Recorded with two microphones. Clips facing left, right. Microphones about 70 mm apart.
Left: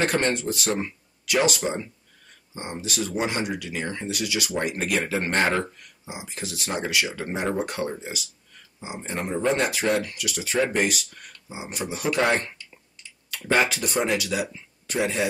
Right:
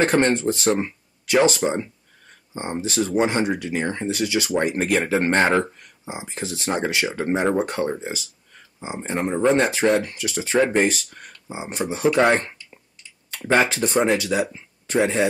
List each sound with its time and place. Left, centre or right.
0.0 s speech: right